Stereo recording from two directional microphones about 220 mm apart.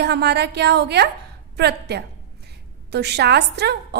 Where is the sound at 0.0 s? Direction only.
50° right (ahead or behind).